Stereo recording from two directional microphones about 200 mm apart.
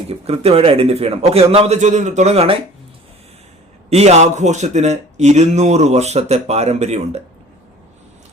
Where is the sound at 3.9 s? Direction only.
35° right (ahead or behind).